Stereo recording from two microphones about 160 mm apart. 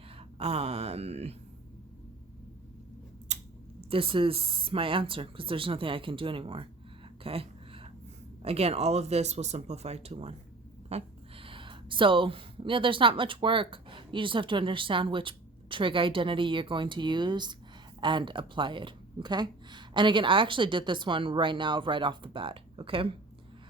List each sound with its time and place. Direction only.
0.3 s speech: 40° right (ahead or behind)
3.3 s scissors: 45° right (ahead or behind)
3.8 s speech: 35° right (ahead or behind)
7.3 s a sound: 35° right (ahead or behind)
8.4 s speech: 40° right (ahead or behind)